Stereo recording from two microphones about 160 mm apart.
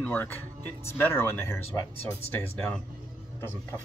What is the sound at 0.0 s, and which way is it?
Speech, 15° left (ahead or behind).